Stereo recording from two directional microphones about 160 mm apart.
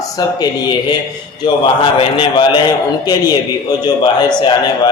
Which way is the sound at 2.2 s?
30° left (ahead or behind).